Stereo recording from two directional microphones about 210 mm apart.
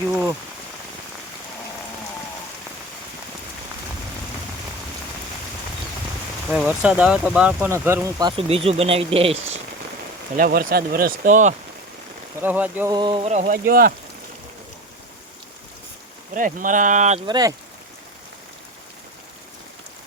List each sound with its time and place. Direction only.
6.5 s speech: 5° right (ahead or behind); by 9.6 s 30° right (ahead or behind)
10.3 s speech: 45° right (ahead or behind)
12.4 s speech: 10° right (ahead or behind)
12.9 s a sound: 20° right (ahead or behind); by 13.9 s 45° right (ahead or behind)
16.3 s a sound: 40° right (ahead or behind)
17.2 s speech: 20° right (ahead or behind)